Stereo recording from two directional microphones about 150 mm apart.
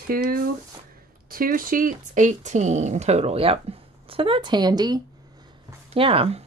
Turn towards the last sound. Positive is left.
turn(degrees=-40)  # may be behind; listen again after turning